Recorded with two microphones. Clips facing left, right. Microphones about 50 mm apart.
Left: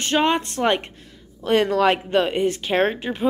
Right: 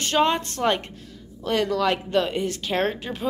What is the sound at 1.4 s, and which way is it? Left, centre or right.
Speech, left.